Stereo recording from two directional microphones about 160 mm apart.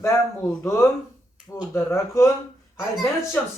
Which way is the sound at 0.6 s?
15° left (ahead or behind).